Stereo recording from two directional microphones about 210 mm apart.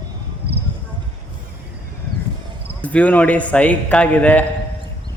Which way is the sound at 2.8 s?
5° left (ahead or behind).